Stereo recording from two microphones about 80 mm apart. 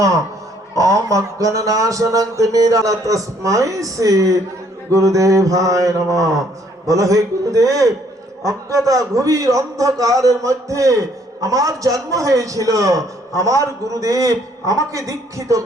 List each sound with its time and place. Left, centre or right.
0.8 s a man's voice: right